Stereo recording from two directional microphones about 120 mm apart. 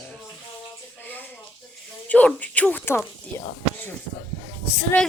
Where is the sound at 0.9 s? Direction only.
15° left (ahead or behind).